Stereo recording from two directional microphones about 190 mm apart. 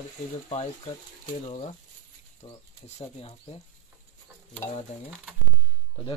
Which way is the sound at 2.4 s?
35° left (ahead or behind).